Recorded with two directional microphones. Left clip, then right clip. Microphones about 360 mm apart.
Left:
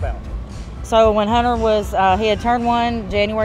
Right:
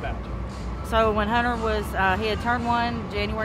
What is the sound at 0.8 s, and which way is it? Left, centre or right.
Speech, left.